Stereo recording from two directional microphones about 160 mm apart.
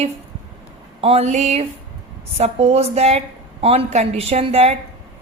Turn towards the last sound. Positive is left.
turn(degrees=-40)  # may be behind; listen again after turning